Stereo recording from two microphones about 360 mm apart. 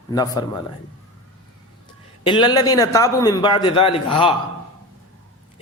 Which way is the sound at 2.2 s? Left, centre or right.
Centre.